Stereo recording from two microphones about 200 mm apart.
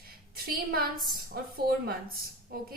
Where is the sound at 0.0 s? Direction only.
50° right (ahead or behind).